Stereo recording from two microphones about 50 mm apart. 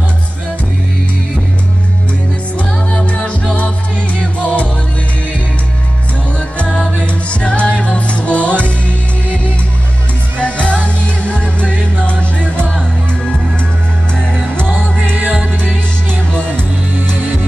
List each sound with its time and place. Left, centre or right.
2.6 s music: left
6.6 s music: centre
15.1 s music: right
16.3 s music: left
16.9 s music: right